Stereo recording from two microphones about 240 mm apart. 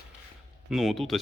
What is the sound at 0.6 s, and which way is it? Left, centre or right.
Speech, centre.